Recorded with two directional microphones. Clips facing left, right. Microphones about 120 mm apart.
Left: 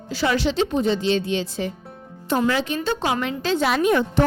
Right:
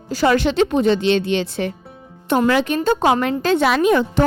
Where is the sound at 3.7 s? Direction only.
90° right.